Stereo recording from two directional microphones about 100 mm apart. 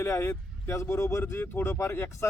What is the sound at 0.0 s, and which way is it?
Speech, 25° left (ahead or behind).